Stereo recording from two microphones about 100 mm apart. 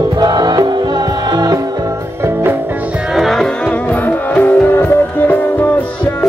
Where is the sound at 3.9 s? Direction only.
20° left (ahead or behind).